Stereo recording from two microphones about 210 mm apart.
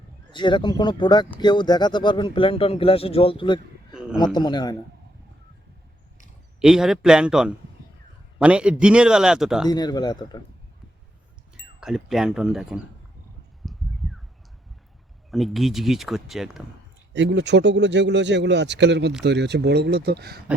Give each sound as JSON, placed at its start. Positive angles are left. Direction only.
{"t": 0.3, "sound": "speech", "side_deg": 20}
{"t": 6.6, "sound": "speech", "side_deg": 0}
{"t": 9.6, "sound": "speech", "side_deg": 20}
{"t": 11.8, "sound": "speech", "side_deg": 0}
{"t": 13.6, "sound": "a sound", "side_deg": 0}
{"t": 15.3, "sound": "speech", "side_deg": 0}
{"t": 17.2, "sound": "speech", "side_deg": -60}